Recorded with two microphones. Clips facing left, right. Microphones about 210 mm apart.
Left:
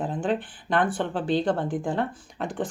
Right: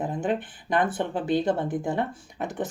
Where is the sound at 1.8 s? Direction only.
20° right (ahead or behind).